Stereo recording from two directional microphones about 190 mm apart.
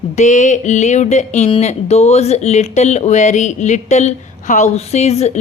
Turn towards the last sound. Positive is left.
turn(degrees=35)  # may be behind; listen again after turning